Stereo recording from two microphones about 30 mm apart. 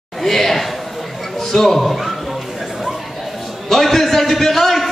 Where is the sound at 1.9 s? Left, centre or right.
Centre.